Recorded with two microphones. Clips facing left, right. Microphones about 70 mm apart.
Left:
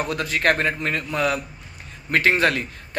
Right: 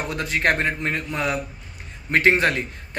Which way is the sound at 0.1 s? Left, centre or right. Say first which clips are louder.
Right 1 dB; right.